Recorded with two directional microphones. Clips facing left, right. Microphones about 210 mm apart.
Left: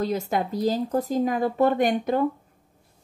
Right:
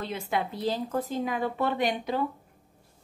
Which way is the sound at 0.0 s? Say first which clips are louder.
Left 6 dB; 40° left (ahead or behind).